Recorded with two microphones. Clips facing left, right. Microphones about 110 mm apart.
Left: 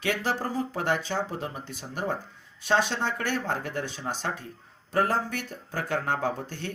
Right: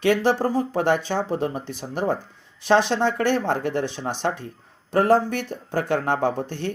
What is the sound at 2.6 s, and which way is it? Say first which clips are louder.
Speech: right 6 dB; 90° right.